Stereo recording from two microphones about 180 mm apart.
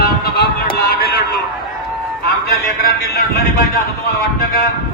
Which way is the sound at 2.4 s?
60° left (ahead or behind).